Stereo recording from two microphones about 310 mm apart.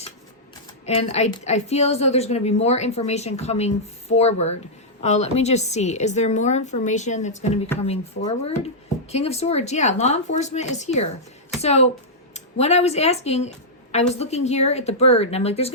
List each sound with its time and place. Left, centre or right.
0.9 s a woman's voice: centre